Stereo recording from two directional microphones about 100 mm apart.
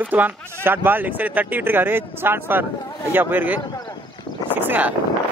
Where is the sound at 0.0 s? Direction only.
15° right (ahead or behind).